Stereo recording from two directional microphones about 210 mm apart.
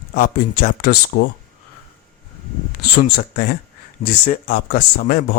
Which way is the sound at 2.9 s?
45° left (ahead or behind).